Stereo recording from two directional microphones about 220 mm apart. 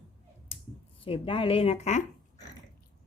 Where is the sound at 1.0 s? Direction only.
25° left (ahead or behind).